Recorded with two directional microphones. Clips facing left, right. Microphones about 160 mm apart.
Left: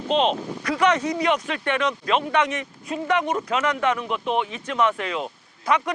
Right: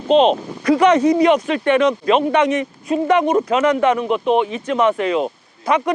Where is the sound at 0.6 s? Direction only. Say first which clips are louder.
Right 8 dB; 25° right (ahead or behind).